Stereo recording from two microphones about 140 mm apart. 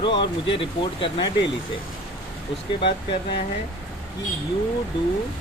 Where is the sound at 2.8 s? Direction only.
35° left (ahead or behind).